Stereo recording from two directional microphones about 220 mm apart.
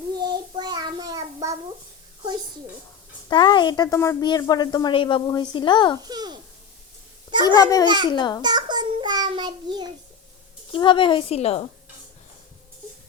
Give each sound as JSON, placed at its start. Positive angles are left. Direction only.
{"t": 0.2, "sound": "child singing", "side_deg": -20}
{"t": 3.2, "sound": "speech", "side_deg": 20}
{"t": 6.1, "sound": "babbling", "side_deg": -20}
{"t": 7.4, "sound": "a child's voice", "side_deg": 15}
{"t": 8.4, "sound": "child singing", "side_deg": -20}
{"t": 10.7, "sound": "speech", "side_deg": 20}